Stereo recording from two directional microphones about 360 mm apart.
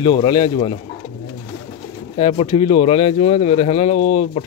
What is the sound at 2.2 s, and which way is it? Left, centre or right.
Speech, centre.